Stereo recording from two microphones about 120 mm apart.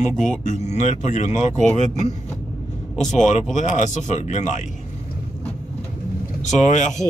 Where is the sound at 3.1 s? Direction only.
90° left.